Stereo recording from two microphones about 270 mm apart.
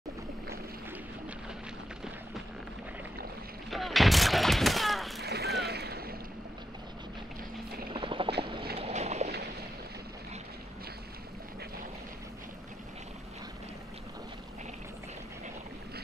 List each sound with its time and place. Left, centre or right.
3.7 s fusillade: centre
5.2 s boat: right
7.9 s a sound: centre
8.4 s boat: centre